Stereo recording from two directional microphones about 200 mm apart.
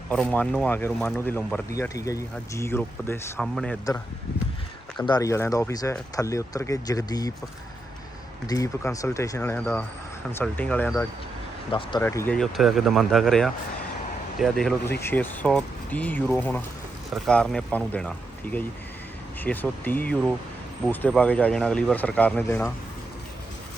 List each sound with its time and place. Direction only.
0.1 s speech: 5° left (ahead or behind)
5.0 s speech: 20° left (ahead or behind)
8.4 s speech: 15° left (ahead or behind)
11.7 s speech: 25° left (ahead or behind)
12.0 s speech: 10° left (ahead or behind)